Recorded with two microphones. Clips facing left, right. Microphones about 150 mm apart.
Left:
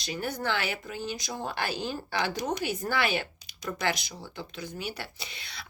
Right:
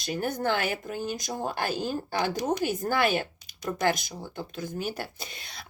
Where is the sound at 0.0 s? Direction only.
50° right (ahead or behind).